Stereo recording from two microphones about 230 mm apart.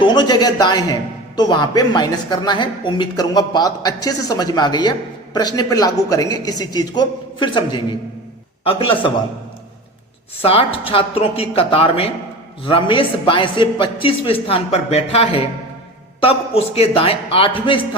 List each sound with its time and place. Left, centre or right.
0.0 s a man's voice: centre
10.4 s a man's voice: left